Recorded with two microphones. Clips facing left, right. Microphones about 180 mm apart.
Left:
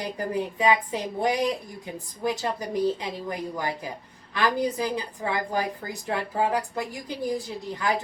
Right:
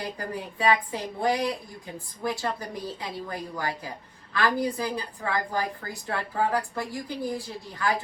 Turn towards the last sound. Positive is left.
turn(degrees=20)  # may be behind; listen again after turning